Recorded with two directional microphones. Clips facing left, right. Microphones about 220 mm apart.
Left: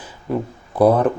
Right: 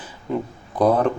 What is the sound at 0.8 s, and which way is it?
Speech, 10° left (ahead or behind).